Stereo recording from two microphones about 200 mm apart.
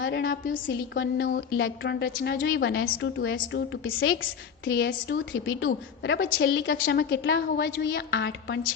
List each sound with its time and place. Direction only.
0.0 s a woman's voice: 55° left (ahead or behind)
0.9 s a woman's voice: 65° left (ahead or behind)
1.5 s a woman's voice: 75° left (ahead or behind)
4.6 s a woman's voice: 65° left (ahead or behind)
6.4 s a woman's voice: 60° left (ahead or behind)